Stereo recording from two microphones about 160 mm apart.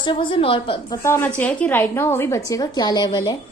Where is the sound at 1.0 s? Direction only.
15° left (ahead or behind).